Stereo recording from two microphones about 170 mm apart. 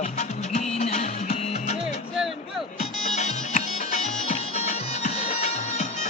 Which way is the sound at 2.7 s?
40° left (ahead or behind).